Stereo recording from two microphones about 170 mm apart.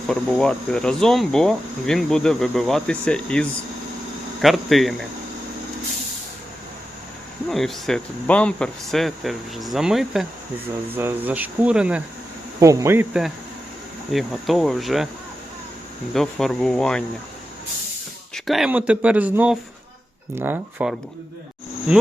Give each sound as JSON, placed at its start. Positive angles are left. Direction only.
{"t": 0.1, "sound": "speech", "side_deg": 5}
{"t": 7.5, "sound": "speech", "side_deg": 0}
{"t": 12.5, "sound": "speech", "side_deg": -20}
{"t": 14.1, "sound": "speech", "side_deg": 0}
{"t": 16.1, "sound": "speech", "side_deg": 0}
{"t": 18.3, "sound": "speech", "side_deg": 0}